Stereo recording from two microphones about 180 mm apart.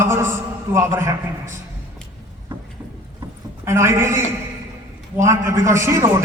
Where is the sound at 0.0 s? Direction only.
15° right (ahead or behind).